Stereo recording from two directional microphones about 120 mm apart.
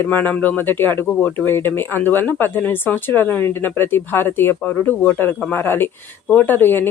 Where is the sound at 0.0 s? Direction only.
15° left (ahead or behind).